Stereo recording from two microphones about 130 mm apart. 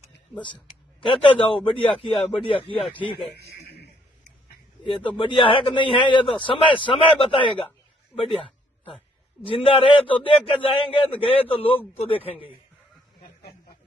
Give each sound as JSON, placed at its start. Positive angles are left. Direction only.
{"t": 0.3, "sound": "speech", "side_deg": 10}
{"t": 1.0, "sound": "a man's voice", "side_deg": 40}
{"t": 5.1, "sound": "a man's voice", "side_deg": 40}
{"t": 9.5, "sound": "a man's voice", "side_deg": 45}